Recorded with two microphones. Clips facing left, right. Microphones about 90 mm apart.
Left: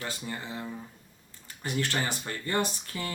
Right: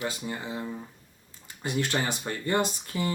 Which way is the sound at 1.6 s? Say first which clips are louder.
Right 2 dB; 20° right (ahead or behind).